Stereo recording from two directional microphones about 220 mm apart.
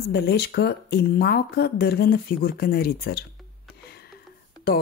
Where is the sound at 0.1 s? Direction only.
50° left (ahead or behind).